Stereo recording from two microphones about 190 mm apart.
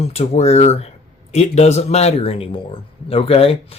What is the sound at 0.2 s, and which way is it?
A man's voice, 35° left (ahead or behind).